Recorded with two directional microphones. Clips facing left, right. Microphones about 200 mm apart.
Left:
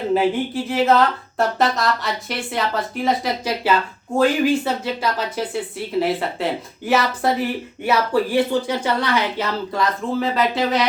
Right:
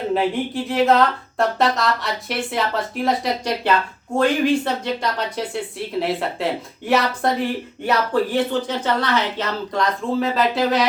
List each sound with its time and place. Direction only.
0.1 s speech: centre (ahead or behind)